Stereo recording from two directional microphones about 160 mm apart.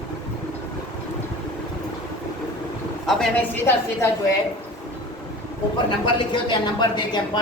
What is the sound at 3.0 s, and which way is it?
Speech, centre (ahead or behind).